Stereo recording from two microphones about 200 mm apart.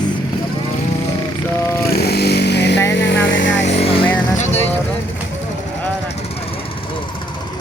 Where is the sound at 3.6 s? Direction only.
30° left (ahead or behind).